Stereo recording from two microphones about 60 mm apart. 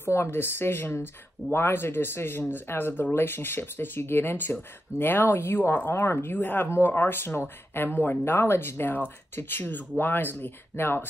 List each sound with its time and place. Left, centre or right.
0.0 s speech: left
6.3 s speech: left